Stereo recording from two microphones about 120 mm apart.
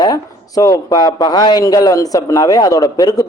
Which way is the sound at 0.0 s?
30° left (ahead or behind).